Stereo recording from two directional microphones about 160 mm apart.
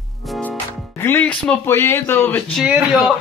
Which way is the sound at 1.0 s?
10° left (ahead or behind).